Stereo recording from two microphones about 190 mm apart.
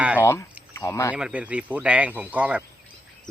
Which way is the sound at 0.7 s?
15° left (ahead or behind).